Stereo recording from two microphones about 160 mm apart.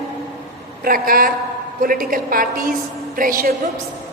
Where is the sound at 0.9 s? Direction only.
65° right (ahead or behind).